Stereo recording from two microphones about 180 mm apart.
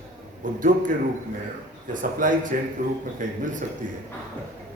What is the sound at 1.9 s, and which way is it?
Speech, 50° right (ahead or behind).